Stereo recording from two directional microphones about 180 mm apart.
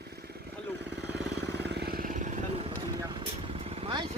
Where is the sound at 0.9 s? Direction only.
70° right (ahead or behind).